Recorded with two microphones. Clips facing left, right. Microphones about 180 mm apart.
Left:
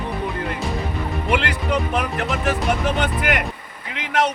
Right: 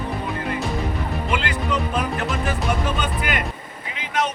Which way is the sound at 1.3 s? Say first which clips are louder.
Left 3 dB; 65° left (ahead or behind).